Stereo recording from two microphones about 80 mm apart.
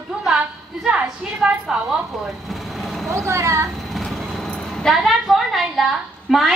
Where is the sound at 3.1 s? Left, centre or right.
Right.